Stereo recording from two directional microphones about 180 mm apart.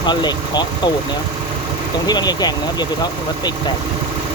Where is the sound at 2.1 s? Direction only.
20° left (ahead or behind).